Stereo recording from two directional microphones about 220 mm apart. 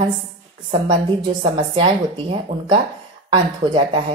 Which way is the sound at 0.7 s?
20° right (ahead or behind).